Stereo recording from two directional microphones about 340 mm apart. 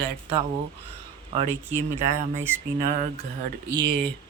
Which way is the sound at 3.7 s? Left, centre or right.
Centre.